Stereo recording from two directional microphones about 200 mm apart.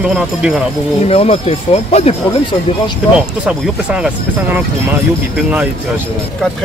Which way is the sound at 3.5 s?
5° right (ahead or behind).